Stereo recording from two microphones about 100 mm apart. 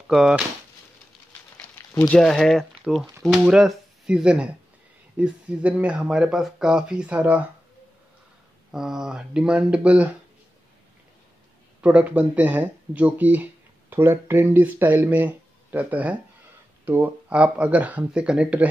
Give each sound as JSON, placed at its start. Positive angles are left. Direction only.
{"t": 0.1, "sound": "speech", "side_deg": -5}
{"t": 2.1, "sound": "speech", "side_deg": 5}
{"t": 8.7, "sound": "speech", "side_deg": -5}
{"t": 11.8, "sound": "speech", "side_deg": -15}